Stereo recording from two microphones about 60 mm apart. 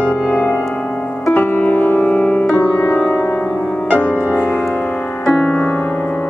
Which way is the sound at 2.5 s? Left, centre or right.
Left.